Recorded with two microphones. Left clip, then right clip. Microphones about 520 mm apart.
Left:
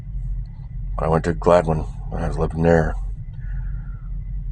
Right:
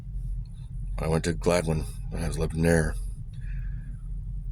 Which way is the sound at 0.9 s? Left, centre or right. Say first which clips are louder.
Left 8 dB; right.